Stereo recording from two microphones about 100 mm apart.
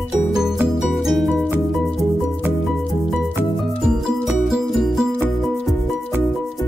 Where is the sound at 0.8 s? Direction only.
Centre (ahead or behind).